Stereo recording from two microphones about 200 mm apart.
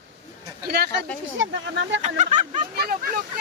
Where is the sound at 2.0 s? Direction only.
35° right (ahead or behind).